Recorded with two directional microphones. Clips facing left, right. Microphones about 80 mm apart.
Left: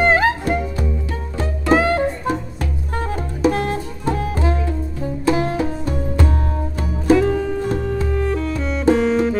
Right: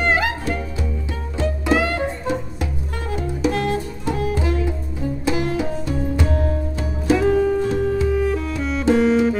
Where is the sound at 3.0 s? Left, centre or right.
Left.